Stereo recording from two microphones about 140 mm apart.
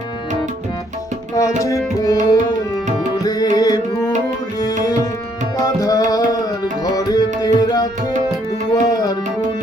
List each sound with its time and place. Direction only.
1.4 s tabla: 25° left (ahead or behind)
3.2 s tabla: 25° left (ahead or behind)
5.5 s tabla: 25° left (ahead or behind)